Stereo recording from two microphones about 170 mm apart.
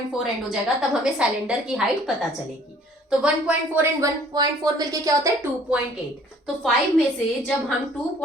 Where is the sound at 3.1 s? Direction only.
5° right (ahead or behind).